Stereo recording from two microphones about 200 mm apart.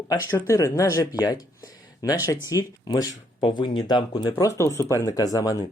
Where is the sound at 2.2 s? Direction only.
15° left (ahead or behind).